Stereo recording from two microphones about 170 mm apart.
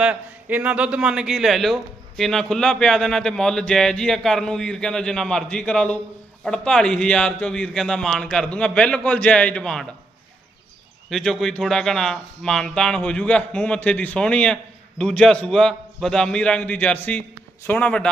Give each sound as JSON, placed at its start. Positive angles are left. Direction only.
{"t": 0.0, "sound": "speech", "side_deg": -10}
{"t": 11.1, "sound": "speech", "side_deg": 0}